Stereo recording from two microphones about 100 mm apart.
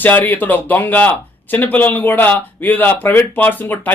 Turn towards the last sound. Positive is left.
turn(degrees=20)  # may be behind; listen again after turning